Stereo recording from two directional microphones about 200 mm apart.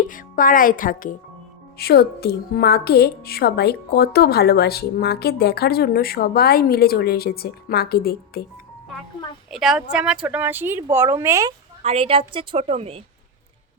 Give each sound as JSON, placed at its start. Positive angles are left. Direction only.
{"t": 0.1, "sound": "speech", "side_deg": 40}
{"t": 1.8, "sound": "a woman's voice", "side_deg": 50}
{"t": 9.5, "sound": "speech", "side_deg": 0}
{"t": 11.8, "sound": "a woman's voice", "side_deg": -30}